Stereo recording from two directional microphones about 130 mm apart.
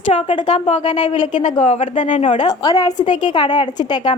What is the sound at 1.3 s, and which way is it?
Speech, 80° left.